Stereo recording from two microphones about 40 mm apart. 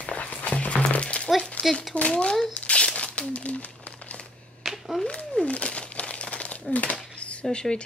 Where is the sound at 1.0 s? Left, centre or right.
Left.